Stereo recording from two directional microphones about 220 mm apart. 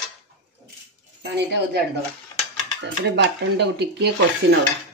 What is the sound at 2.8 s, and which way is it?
Speech, 50° right (ahead or behind).